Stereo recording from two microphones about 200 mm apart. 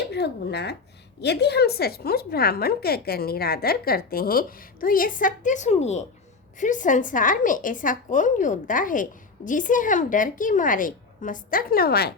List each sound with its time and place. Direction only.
0.1 s a woman's voice: 55° left (ahead or behind)